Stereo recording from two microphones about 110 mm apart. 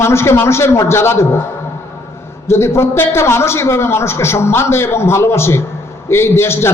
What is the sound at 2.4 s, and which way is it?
A man's voice, 25° left (ahead or behind).